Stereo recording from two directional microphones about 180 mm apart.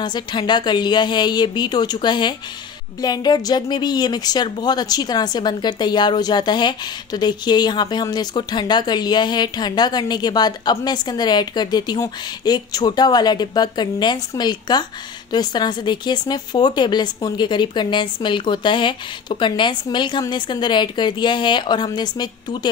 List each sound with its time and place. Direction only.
0.0 s speech: 25° left (ahead or behind)